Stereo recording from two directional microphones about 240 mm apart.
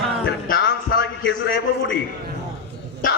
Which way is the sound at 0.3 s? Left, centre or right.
Left.